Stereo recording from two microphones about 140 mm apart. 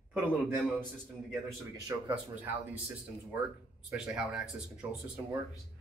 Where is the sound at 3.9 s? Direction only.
5° right (ahead or behind).